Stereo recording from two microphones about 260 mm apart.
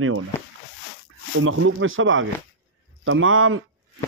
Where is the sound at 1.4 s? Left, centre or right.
Right.